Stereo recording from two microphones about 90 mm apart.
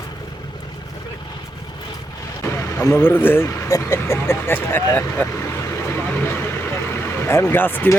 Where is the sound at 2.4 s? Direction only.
35° left (ahead or behind).